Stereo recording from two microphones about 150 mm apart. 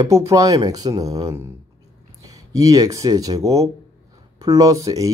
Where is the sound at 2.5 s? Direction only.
20° right (ahead or behind).